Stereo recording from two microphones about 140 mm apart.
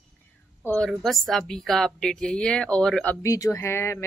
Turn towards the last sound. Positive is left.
turn(degrees=20)  # may be behind; listen again after turning